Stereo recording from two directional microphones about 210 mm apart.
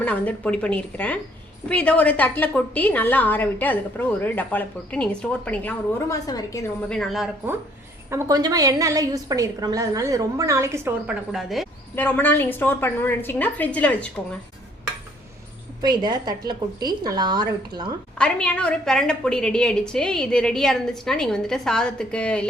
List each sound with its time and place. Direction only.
0.0 s a woman's voice: 5° left (ahead or behind)
6.9 s a woman's voice: centre (ahead or behind)
8.1 s a woman's voice: 20° right (ahead or behind); by 14.1 s 5° left (ahead or behind)
15.8 s speech: 20° right (ahead or behind)
18.2 s a woman's voice: 5° left (ahead or behind)